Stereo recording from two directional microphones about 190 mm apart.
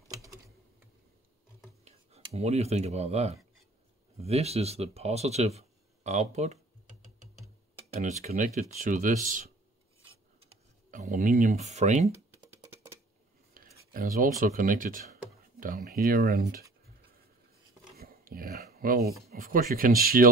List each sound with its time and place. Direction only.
0.1 s typing: 15° right (ahead or behind)
1.9 s speech: 35° right (ahead or behind)
7.9 s speech: 40° right (ahead or behind)
10.9 s speech: 40° right (ahead or behind)
13.5 s speech: 45° right (ahead or behind)
17.9 s speech: 50° right (ahead or behind)